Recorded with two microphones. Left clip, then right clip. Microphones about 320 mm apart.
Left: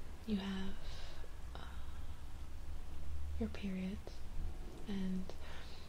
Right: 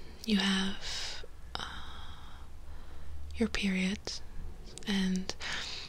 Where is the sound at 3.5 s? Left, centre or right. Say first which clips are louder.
Right 13 dB; right.